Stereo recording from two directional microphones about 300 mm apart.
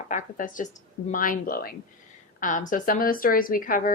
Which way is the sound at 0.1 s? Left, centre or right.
Left.